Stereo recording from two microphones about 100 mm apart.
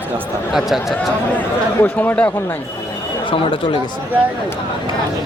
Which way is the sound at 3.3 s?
60° left (ahead or behind).